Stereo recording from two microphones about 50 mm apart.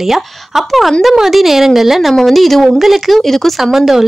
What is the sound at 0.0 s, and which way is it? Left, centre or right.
A woman's voice, centre.